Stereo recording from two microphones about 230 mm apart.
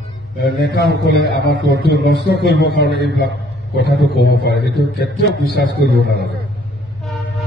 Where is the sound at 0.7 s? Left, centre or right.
Left.